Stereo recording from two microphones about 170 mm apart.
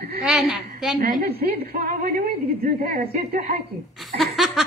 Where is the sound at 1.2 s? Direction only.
65° right (ahead or behind).